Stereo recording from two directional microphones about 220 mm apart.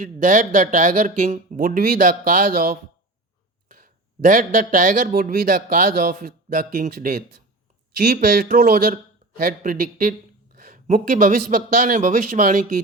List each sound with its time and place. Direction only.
0.0 s a man's voice: 40° right (ahead or behind)